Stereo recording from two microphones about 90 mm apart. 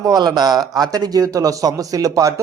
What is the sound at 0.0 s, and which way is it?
A man's voice, 45° right (ahead or behind).